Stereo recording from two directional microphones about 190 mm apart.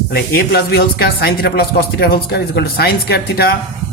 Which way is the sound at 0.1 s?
55° left (ahead or behind).